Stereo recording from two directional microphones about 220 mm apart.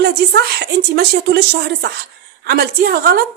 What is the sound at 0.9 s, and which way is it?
A woman's voice, 50° right (ahead or behind).